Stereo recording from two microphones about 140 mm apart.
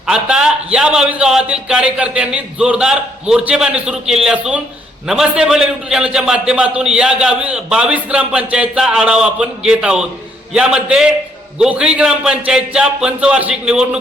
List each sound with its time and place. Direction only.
0.1 s a man's voice: 5° right (ahead or behind)